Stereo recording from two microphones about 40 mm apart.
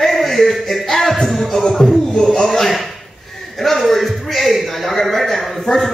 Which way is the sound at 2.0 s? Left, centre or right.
Centre.